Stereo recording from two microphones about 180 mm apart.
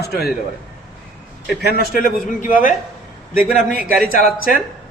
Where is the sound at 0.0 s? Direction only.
60° left (ahead or behind).